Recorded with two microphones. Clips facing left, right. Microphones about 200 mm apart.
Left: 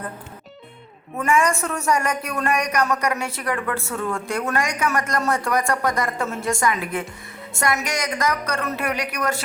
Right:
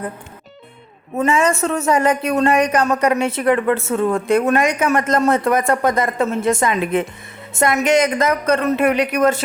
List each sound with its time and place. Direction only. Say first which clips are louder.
1.6 s a woman's voice: right 6 dB; 25° right (ahead or behind)